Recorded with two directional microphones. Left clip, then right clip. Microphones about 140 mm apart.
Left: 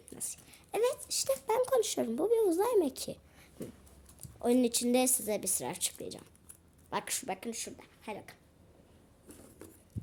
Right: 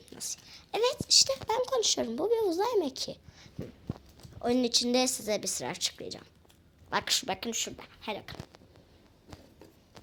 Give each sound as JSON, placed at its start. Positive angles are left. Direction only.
{"t": 0.1, "sound": "a sound", "side_deg": 20}
{"t": 1.3, "sound": "a woman's voice", "side_deg": 30}
{"t": 6.9, "sound": "a woman's voice", "side_deg": 10}
{"t": 7.3, "sound": "a woman's voice", "side_deg": -5}